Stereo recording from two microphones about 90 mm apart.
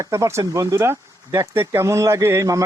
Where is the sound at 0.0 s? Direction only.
35° right (ahead or behind).